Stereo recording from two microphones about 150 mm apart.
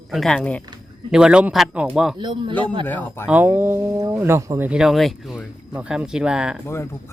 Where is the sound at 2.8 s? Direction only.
15° left (ahead or behind).